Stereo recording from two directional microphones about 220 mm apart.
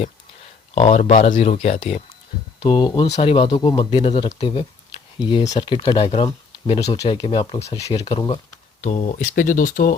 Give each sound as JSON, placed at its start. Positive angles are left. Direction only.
{"t": 0.7, "sound": "speech", "side_deg": 30}
{"t": 8.8, "sound": "speech", "side_deg": 35}